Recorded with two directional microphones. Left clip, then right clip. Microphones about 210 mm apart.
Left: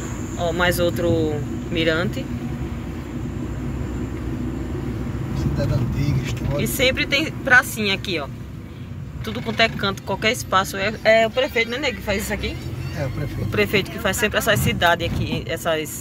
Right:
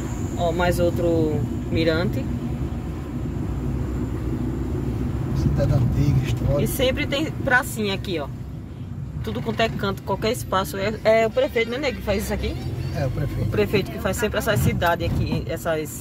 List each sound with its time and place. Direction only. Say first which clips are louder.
0.4 s speech: left 1 dB; 10° right (ahead or behind)
6.6 s speech: left 5 dB; 10° right (ahead or behind)
9.3 s speech: left 3 dB; 10° right (ahead or behind)
13.5 s speech: left 2 dB; centre (ahead or behind)